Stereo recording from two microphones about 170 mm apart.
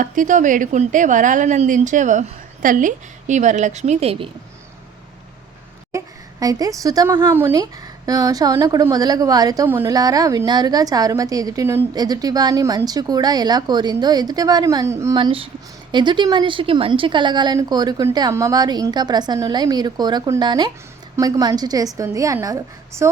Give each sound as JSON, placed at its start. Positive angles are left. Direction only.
{"t": 0.0, "sound": "a woman's voice", "side_deg": -50}
{"t": 6.4, "sound": "a woman's voice", "side_deg": -20}